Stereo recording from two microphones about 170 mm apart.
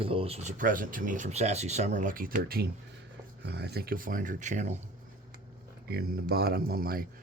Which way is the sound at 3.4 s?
75° right (ahead or behind).